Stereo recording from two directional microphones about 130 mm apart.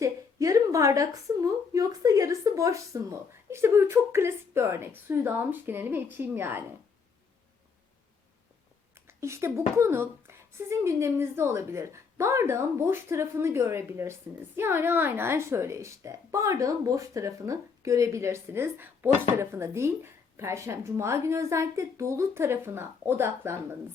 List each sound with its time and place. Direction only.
0.0 s speech: 25° right (ahead or behind)
9.0 s speech: 20° right (ahead or behind)